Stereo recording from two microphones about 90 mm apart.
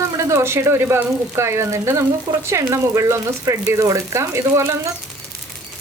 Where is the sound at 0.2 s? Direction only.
30° right (ahead or behind).